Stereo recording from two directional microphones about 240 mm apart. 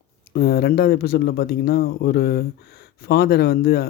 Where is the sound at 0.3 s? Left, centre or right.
Left.